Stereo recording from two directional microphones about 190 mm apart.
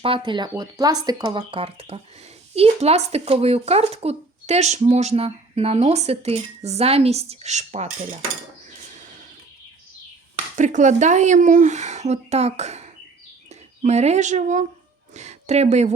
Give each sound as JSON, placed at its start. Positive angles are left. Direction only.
{"t": 0.0, "sound": "speech", "side_deg": -25}
{"t": 10.3, "sound": "a woman's voice", "side_deg": -40}